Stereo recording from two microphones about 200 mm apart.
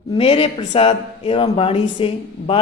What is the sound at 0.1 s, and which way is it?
Speech, 30° left (ahead or behind).